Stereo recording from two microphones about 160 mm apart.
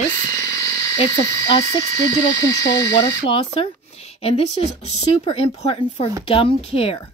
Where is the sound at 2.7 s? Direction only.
20° left (ahead or behind).